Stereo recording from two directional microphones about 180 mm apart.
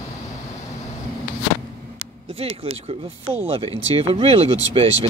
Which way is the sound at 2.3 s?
35° right (ahead or behind).